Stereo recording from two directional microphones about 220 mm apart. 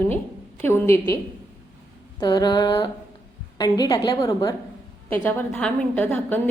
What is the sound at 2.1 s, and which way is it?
Mantra, 20° left (ahead or behind).